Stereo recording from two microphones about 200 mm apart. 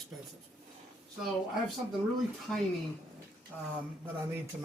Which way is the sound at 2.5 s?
Centre (ahead or behind).